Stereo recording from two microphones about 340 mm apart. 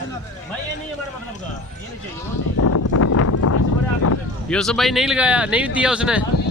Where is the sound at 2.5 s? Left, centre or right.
Left.